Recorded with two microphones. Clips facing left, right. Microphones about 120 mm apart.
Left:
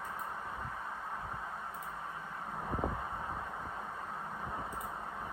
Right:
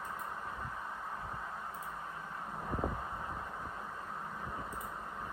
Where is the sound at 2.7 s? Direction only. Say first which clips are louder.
Left 1 dB; 5° left (ahead or behind).